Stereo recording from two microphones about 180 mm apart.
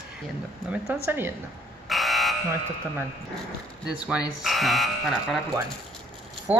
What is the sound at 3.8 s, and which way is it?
Speech, 5° right (ahead or behind).